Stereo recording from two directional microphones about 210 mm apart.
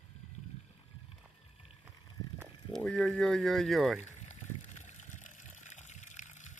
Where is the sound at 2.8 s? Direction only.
5° left (ahead or behind).